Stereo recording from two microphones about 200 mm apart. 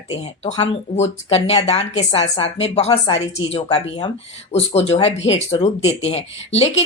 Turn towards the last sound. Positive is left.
turn(degrees=30)  # may be behind; listen again after turning